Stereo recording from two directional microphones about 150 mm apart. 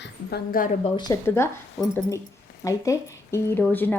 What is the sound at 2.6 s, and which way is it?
Speech, 20° left (ahead or behind).